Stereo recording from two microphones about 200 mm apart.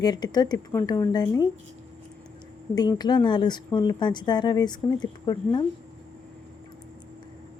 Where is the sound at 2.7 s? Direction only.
20° left (ahead or behind).